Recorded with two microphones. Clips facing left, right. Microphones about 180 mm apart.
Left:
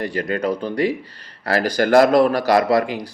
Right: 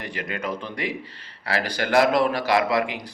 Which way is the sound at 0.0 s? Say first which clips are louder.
Left 8 dB; 35° left (ahead or behind).